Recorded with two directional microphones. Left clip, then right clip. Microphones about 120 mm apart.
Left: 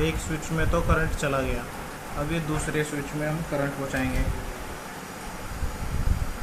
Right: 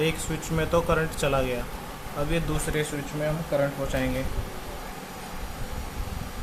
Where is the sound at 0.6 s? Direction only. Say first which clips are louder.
Right 2 dB; 55° right (ahead or behind).